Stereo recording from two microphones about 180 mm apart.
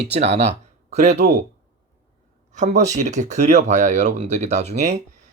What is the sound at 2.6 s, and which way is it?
Speech, 40° right (ahead or behind).